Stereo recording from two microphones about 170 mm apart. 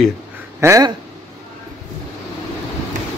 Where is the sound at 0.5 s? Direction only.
15° right (ahead or behind).